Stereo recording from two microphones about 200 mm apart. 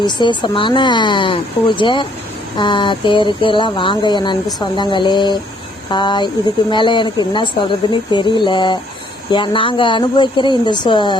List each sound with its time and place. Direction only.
0.0 s speech: 20° left (ahead or behind)